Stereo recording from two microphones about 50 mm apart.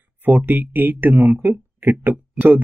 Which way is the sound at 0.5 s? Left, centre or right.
Right.